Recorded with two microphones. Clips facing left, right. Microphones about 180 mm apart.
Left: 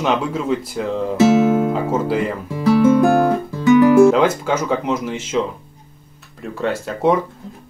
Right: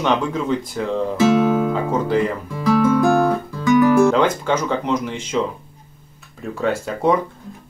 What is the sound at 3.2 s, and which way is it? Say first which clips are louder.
Guitar: left 3 dB; 25° left (ahead or behind).